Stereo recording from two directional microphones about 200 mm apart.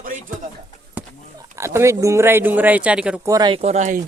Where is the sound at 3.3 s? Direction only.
20° right (ahead or behind).